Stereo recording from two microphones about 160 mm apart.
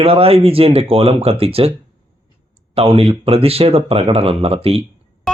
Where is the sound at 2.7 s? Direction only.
35° right (ahead or behind).